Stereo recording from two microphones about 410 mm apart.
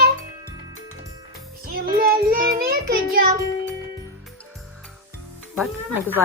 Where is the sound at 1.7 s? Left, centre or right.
Right.